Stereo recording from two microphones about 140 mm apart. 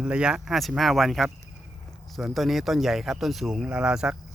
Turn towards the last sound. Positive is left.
turn(degrees=-5)  # may be behind; listen again after turning